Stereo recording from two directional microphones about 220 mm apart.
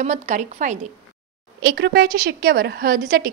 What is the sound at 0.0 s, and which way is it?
Speech, 35° right (ahead or behind).